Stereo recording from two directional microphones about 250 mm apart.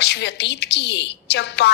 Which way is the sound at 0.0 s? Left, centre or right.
Left.